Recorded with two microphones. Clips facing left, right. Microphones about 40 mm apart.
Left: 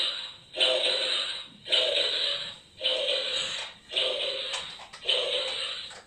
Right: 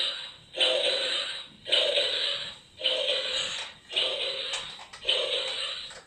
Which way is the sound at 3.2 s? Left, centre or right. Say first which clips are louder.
Even; right.